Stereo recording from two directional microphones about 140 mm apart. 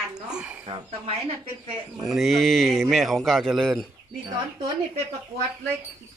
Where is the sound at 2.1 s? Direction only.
Centre (ahead or behind).